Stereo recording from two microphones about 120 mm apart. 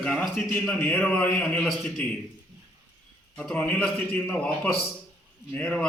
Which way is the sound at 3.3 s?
10° left (ahead or behind).